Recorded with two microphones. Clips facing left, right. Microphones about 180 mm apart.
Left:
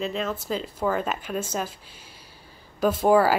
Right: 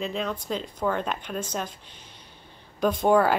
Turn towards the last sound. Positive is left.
turn(degrees=5)  # may be behind; listen again after turning